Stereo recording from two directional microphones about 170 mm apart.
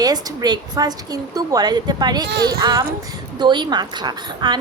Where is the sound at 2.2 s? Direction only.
75° right (ahead or behind).